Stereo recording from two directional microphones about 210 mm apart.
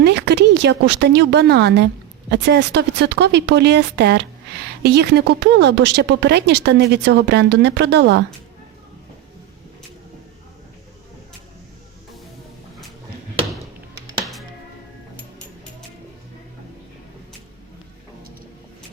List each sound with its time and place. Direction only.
0.0 s a woman's voice: 55° right (ahead or behind)